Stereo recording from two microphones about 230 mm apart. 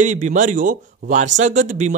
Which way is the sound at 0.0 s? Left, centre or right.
Right.